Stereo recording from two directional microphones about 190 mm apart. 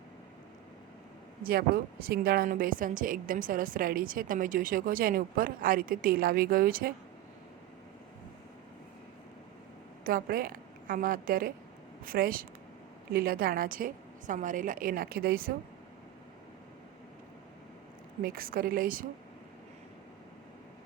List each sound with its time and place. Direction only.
1.5 s a woman's voice: 50° right (ahead or behind)
10.0 s a woman's voice: 50° right (ahead or behind)
18.2 s a woman's voice: 50° right (ahead or behind)